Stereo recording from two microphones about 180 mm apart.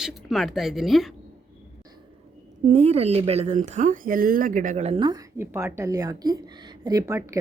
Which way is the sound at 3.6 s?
45° right (ahead or behind).